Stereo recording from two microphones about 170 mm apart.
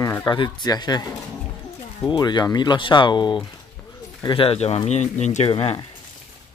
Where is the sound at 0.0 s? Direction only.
20° left (ahead or behind).